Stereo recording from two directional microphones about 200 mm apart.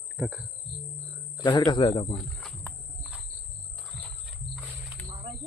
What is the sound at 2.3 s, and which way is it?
Wild animals, 10° left (ahead or behind).